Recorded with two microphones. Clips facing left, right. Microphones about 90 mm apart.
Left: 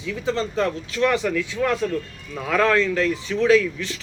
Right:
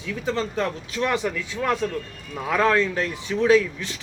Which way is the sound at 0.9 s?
25° right (ahead or behind).